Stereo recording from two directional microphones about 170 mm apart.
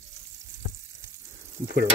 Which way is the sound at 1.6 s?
70° right (ahead or behind).